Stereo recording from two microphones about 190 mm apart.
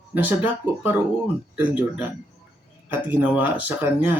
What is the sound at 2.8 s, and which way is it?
Speech, 10° right (ahead or behind).